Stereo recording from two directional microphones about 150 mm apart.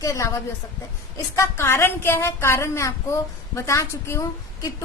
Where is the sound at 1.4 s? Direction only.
15° left (ahead or behind).